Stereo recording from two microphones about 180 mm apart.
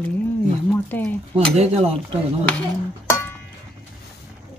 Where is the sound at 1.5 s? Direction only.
35° right (ahead or behind).